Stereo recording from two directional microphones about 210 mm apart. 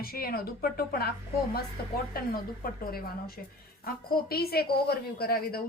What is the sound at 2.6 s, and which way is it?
A woman's voice, 45° left (ahead or behind).